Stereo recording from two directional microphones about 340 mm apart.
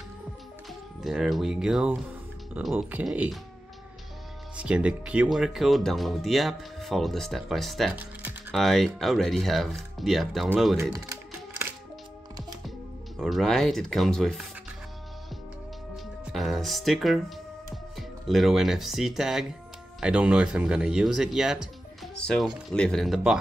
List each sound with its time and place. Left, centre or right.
1.0 s speech: centre
4.6 s speech: centre
13.2 s speech: centre
16.3 s speech: centre